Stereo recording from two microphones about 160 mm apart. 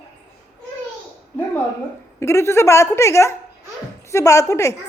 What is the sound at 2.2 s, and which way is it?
A woman's voice, 15° left (ahead or behind).